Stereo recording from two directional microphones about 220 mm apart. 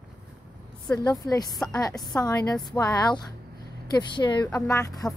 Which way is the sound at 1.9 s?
Centre (ahead or behind).